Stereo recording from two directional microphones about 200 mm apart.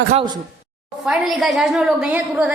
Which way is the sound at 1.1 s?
Centre (ahead or behind).